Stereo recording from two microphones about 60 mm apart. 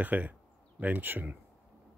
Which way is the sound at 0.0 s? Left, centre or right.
Right.